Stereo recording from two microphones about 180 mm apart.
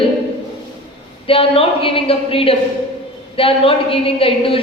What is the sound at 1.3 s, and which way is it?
A woman's voice, 30° left (ahead or behind).